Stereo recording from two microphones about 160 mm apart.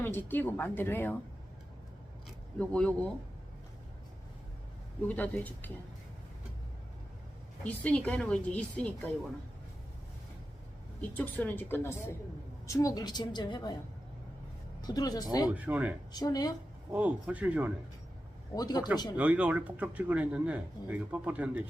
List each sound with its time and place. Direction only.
0.0 s a woman's voice: 10° left (ahead or behind)
2.6 s a woman's voice: 5° left (ahead or behind)
5.0 s a woman's voice: 10° left (ahead or behind)
7.6 s a woman's voice: 10° left (ahead or behind)
11.1 s a woman's voice: 10° left (ahead or behind); by 13.7 s 25° left (ahead or behind)
14.8 s a woman's voice: 25° left (ahead or behind)
15.5 s a man's voice: 10° right (ahead or behind)
16.1 s a woman's voice: 25° left (ahead or behind)
16.9 s a man's voice: 10° right (ahead or behind)
18.5 s a woman's voice: 25° left (ahead or behind)
19.1 s a man's voice: 10° right (ahead or behind)